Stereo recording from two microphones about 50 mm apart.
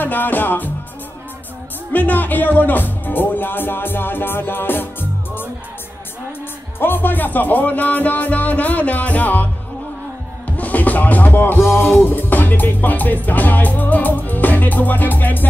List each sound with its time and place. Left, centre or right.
0.0 s music: left
1.9 s speech: left
6.8 s music: left
10.6 s music: left